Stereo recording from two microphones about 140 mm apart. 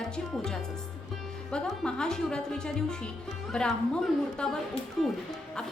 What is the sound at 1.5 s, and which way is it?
A woman's voice, 5° left (ahead or behind).